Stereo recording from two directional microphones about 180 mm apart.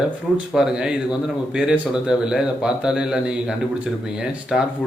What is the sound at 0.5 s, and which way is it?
A man's voice, 5° right (ahead or behind).